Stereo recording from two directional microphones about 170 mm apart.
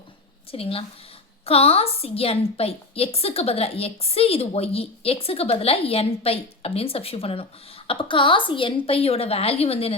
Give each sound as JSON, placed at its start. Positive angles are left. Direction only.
{"t": 0.5, "sound": "a woman's voice", "side_deg": 35}